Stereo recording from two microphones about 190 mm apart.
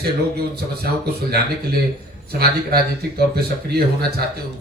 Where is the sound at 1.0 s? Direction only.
55° right (ahead or behind).